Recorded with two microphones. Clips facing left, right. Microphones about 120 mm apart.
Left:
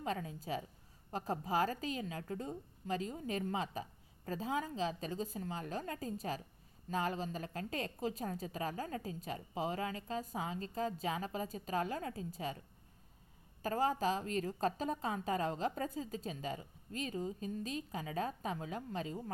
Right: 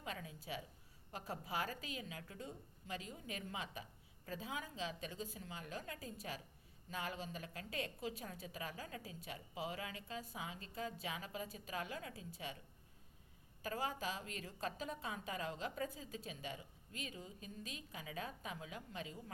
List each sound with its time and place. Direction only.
0.0 s a woman's voice: 40° left (ahead or behind)
13.6 s a woman's voice: 40° left (ahead or behind)